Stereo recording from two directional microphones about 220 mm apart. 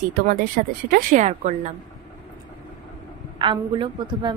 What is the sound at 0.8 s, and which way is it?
Speech, 40° right (ahead or behind).